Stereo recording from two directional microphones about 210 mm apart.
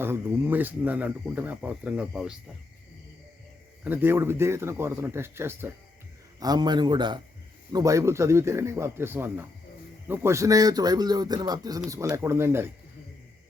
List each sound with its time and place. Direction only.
0.0 s speech: 10° right (ahead or behind)
3.8 s speech: 10° right (ahead or behind)